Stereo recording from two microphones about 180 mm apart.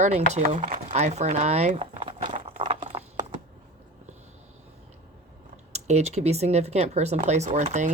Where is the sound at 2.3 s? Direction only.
40° right (ahead or behind).